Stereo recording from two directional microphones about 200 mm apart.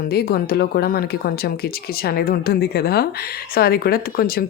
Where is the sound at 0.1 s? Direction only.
50° left (ahead or behind).